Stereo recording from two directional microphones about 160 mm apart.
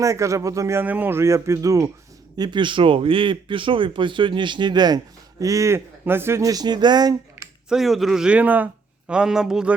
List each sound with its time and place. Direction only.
0.0 s speech: 20° right (ahead or behind)
7.7 s speech: centre (ahead or behind)